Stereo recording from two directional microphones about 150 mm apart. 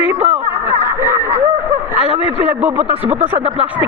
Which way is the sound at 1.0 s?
15° right (ahead or behind).